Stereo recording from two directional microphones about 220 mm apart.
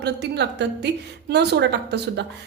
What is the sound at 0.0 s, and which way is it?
A woman's voice, 50° right (ahead or behind).